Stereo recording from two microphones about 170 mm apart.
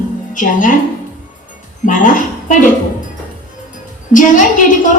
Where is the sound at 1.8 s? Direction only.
50° left (ahead or behind).